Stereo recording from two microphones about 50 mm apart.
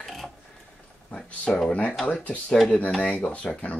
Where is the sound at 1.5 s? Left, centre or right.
Centre.